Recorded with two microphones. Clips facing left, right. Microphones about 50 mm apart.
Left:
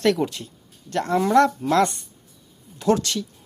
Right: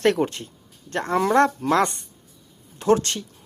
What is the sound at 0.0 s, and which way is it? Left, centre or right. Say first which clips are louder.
Speech: right 1 dB; right.